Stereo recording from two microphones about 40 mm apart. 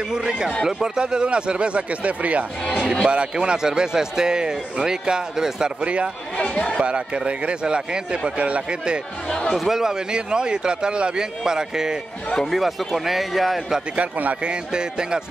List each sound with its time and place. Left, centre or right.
0.1 s a man's voice: right
6.3 s speech: left
6.8 s a man's voice: right
9.3 s speech: centre
9.7 s speech: centre
10.1 s a man's voice: right
12.4 s speech: centre
13.9 s speech: right
14.4 s a man's voice: right